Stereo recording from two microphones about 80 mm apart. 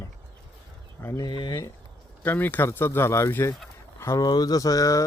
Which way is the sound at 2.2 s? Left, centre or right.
Left.